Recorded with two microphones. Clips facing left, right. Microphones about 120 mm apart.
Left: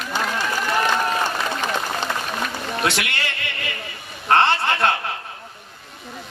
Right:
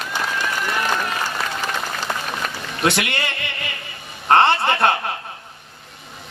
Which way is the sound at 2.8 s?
20° right (ahead or behind).